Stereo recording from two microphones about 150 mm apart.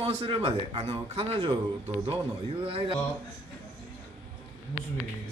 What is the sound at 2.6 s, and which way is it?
Speech, 40° right (ahead or behind).